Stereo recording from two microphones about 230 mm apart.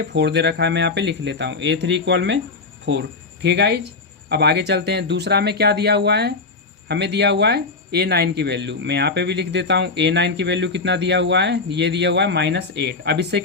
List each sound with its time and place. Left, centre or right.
0.0 s speech: right
3.4 s speech: right